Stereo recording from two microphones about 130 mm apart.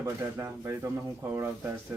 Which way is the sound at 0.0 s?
20° right (ahead or behind).